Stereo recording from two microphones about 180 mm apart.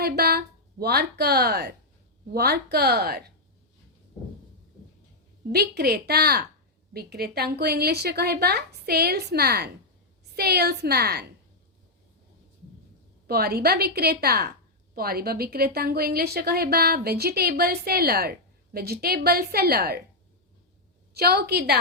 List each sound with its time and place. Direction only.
0.0 s a woman's voice: 60° right (ahead or behind)
5.5 s a woman's voice: 65° right (ahead or behind)
13.2 s a woman's voice: 60° right (ahead or behind)
21.1 s a woman's voice: 60° right (ahead or behind)